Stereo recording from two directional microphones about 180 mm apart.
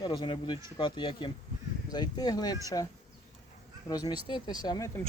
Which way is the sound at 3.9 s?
20° left (ahead or behind).